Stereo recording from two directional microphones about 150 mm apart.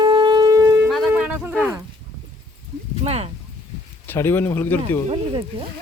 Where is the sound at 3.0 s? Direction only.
45° right (ahead or behind).